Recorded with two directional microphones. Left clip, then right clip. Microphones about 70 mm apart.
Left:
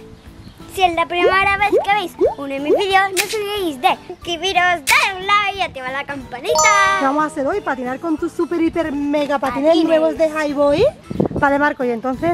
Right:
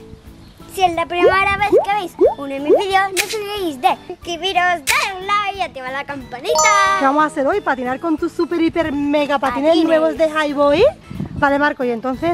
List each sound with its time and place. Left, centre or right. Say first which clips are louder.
0.7 s speech: even; centre
6.9 s speech: right 2 dB; right
8.0 s speech: right 1 dB; centre
10.3 s speech: right 1 dB; centre
10.7 s speech: right 2 dB; centre